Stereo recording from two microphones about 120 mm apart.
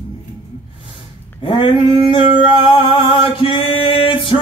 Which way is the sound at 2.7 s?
45° left (ahead or behind).